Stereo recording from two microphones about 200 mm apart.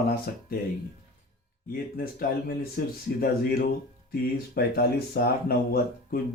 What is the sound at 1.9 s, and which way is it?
Speech, 45° left (ahead or behind).